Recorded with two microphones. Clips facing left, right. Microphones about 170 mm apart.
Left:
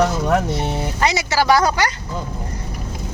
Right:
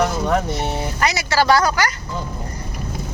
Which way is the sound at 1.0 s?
25° left (ahead or behind).